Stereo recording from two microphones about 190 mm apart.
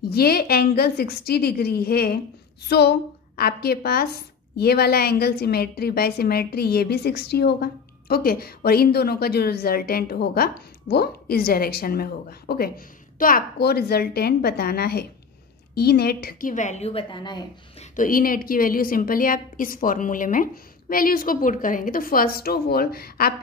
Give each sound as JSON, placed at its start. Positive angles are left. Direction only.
{"t": 0.1, "sound": "a woman's voice", "side_deg": 55}
{"t": 17.9, "sound": "a woman's voice", "side_deg": 45}